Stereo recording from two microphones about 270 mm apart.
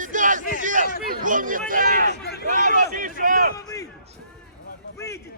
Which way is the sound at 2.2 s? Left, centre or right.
Left.